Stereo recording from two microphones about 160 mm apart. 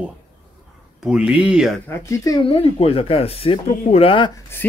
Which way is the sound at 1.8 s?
20° left (ahead or behind).